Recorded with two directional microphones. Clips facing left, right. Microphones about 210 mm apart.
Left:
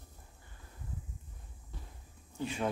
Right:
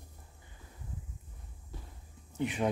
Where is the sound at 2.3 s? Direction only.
20° right (ahead or behind).